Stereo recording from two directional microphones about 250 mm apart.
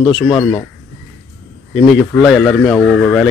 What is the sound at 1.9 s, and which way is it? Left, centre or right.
Speech, centre.